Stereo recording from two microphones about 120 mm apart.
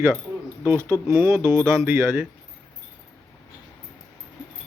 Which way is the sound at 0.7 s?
20° right (ahead or behind).